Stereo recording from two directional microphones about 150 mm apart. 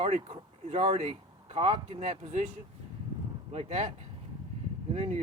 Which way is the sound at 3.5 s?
40° right (ahead or behind).